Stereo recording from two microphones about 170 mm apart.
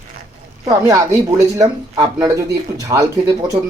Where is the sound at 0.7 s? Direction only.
20° right (ahead or behind).